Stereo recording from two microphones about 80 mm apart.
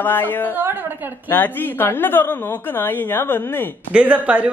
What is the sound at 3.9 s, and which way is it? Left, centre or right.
Speech, centre.